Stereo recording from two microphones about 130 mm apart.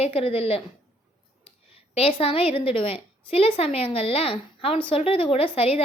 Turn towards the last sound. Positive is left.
turn(degrees=50)  # may be behind; listen again after turning